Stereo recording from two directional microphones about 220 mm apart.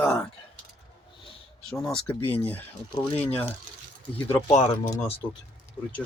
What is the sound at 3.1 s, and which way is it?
Speech, 25° left (ahead or behind).